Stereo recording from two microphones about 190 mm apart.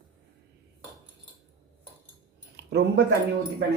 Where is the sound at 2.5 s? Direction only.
65° right (ahead or behind).